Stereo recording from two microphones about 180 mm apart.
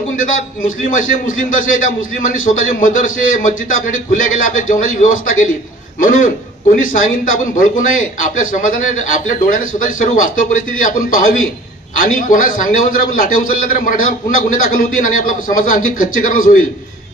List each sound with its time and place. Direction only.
0.2 s a man's voice: 50° left (ahead or behind)